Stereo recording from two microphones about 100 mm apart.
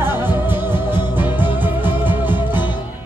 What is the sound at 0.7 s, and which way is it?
Music, 45° left (ahead or behind).